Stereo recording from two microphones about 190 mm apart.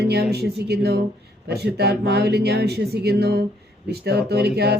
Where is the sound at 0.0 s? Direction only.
55° right (ahead or behind).